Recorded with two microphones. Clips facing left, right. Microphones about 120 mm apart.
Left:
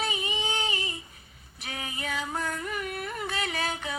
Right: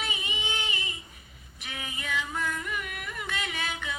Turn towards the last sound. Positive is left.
turn(degrees=35)  # may be behind; listen again after turning